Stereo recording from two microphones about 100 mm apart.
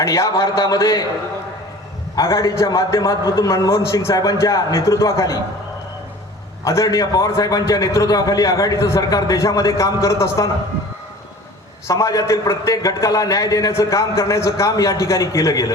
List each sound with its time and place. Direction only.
0.0 s a man's voice: 30° left (ahead or behind)
2.1 s a man's voice: 30° left (ahead or behind)
6.7 s a man's voice: 30° left (ahead or behind)
11.9 s a man's voice: 30° left (ahead or behind)